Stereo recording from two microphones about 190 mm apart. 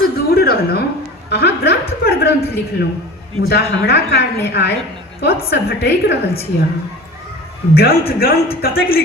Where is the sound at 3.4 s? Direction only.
60° left (ahead or behind).